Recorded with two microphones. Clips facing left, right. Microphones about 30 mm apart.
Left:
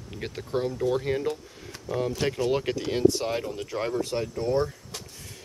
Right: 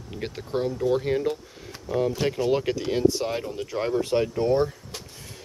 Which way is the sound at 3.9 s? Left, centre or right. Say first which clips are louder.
Right 5 dB; right.